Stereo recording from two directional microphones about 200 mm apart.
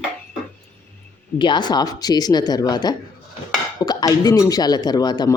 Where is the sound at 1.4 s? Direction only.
20° left (ahead or behind).